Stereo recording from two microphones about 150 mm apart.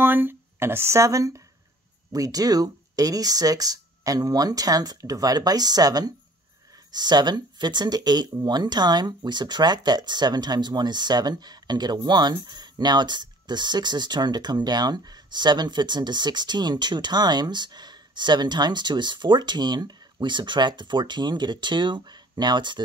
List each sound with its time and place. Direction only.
0.0 s speech: 15° right (ahead or behind); by 22.8 s 30° right (ahead or behind)